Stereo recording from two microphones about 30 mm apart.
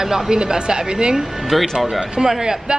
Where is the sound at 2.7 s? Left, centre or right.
Right.